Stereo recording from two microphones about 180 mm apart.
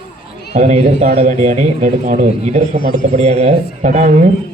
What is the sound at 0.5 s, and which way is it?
A man's voice, 40° right (ahead or behind).